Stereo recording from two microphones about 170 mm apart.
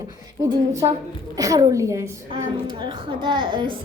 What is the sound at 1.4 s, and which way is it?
Speech, 20° right (ahead or behind).